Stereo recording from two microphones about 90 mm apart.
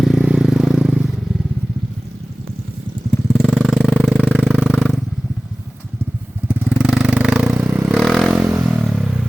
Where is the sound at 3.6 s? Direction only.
5° right (ahead or behind).